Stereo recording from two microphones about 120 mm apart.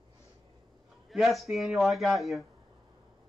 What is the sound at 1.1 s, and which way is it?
Speech, centre (ahead or behind).